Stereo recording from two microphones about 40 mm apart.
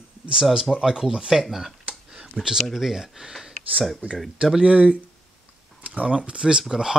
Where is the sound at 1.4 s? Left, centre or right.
Centre.